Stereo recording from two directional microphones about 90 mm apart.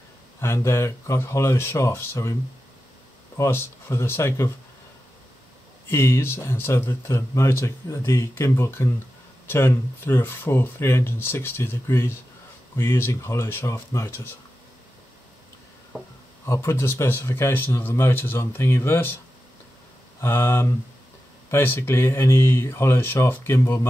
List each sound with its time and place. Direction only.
0.4 s speech: 30° left (ahead or behind)
3.3 s speech: 25° left (ahead or behind)
5.9 s speech: 30° left (ahead or behind)
15.9 s speech: 5° left (ahead or behind)
16.4 s speech: 30° left (ahead or behind)
20.2 s speech: 30° left (ahead or behind)